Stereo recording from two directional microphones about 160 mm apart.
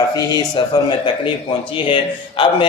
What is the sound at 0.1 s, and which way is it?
A man's voice, 25° left (ahead or behind).